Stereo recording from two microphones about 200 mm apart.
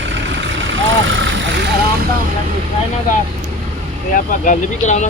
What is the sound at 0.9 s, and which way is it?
Speech, 70° right (ahead or behind).